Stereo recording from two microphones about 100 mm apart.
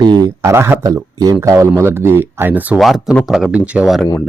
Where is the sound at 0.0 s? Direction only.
45° right (ahead or behind).